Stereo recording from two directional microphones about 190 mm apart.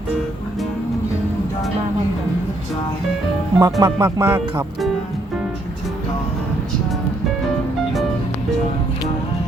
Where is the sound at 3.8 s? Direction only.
15° right (ahead or behind).